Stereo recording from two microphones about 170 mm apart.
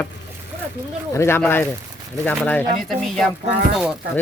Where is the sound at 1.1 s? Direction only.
15° left (ahead or behind).